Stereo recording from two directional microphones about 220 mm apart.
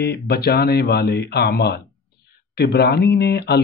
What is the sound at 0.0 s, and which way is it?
Speech, 45° left (ahead or behind).